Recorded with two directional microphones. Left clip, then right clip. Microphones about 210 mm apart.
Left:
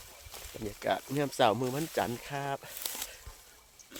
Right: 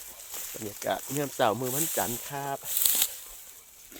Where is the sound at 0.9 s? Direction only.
5° left (ahead or behind).